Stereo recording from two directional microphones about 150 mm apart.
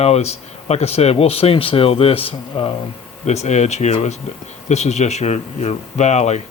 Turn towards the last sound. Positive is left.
turn(degrees=50)  # may be behind; listen again after turning